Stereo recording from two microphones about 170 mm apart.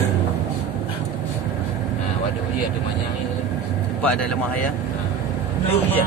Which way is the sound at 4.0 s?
10° left (ahead or behind).